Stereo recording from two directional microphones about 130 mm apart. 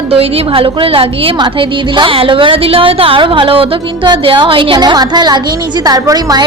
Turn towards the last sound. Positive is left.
turn(degrees=-30)  # may be behind; listen again after turning